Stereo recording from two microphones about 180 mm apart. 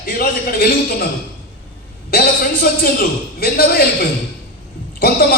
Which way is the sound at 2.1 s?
55° left (ahead or behind).